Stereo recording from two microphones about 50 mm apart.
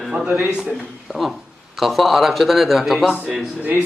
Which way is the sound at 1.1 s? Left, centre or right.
Centre.